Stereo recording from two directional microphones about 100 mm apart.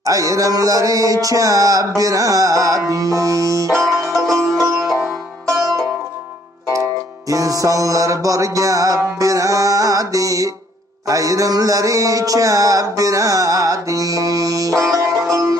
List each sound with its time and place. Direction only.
0.0 s music: 35° right (ahead or behind)
3.7 s banjo: centre (ahead or behind)
4.8 s music: centre (ahead or behind)
6.7 s music: 30° right (ahead or behind)